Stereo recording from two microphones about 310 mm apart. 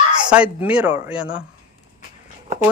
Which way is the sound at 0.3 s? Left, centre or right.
Centre.